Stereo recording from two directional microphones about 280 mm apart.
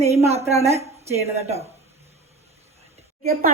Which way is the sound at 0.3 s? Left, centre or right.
Right.